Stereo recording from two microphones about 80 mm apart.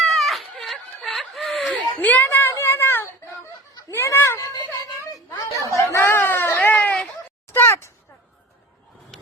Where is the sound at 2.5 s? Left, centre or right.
Left.